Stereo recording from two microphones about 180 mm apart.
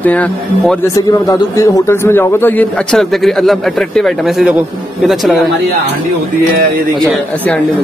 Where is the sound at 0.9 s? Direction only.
20° left (ahead or behind); by 5.4 s centre (ahead or behind).